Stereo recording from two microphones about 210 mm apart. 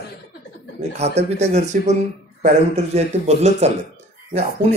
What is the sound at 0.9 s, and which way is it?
Speech, 30° right (ahead or behind).